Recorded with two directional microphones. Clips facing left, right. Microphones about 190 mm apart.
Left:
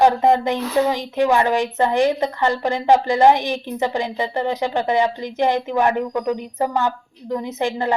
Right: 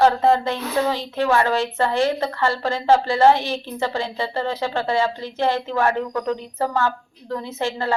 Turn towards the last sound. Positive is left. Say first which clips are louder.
# left 3 dB
turn(degrees=15)  # may be behind; listen again after turning